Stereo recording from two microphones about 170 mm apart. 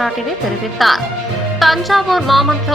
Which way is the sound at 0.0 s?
Centre (ahead or behind).